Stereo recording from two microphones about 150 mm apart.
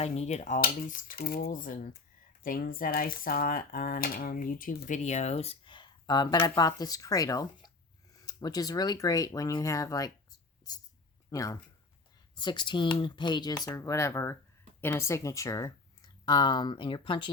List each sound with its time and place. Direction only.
0.0 s speech: 45° left (ahead or behind); by 10.1 s 20° left (ahead or behind)
11.3 s speech: 20° left (ahead or behind)